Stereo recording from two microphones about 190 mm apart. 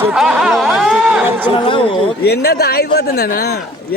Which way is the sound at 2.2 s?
55° left (ahead or behind).